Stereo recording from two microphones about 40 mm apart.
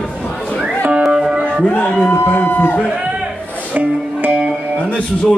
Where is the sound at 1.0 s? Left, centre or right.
Centre.